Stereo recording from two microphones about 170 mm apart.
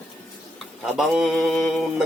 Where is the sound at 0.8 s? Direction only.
Centre (ahead or behind).